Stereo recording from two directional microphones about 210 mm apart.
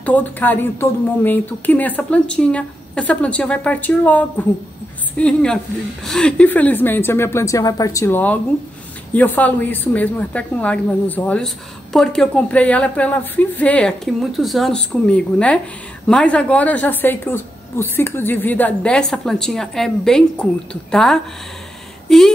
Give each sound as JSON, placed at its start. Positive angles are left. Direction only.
{"t": 0.0, "sound": "a woman's voice", "side_deg": 10}